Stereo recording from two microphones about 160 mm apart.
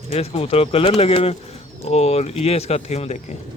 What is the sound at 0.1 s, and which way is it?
Speech, 40° left (ahead or behind).